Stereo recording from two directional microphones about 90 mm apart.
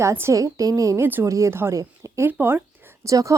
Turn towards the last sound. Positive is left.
turn(degrees=-35)  # may be behind; listen again after turning